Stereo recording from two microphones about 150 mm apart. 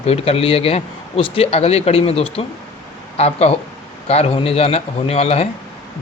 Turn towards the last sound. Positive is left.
turn(degrees=45)  # may be behind; listen again after turning